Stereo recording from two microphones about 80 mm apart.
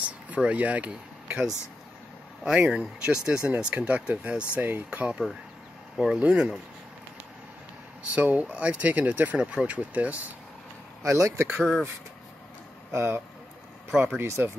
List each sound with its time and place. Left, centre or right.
0.0 s speech: centre
8.1 s speech: right
11.0 s speech: right
12.9 s speech: right
13.8 s speech: right
14.2 s speech: right